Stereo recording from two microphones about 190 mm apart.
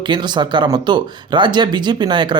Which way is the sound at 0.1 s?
25° right (ahead or behind).